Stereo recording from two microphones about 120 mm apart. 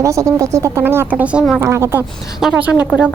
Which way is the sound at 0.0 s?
25° right (ahead or behind).